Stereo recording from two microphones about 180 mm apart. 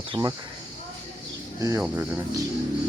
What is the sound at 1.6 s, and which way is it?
Speech, 15° right (ahead or behind).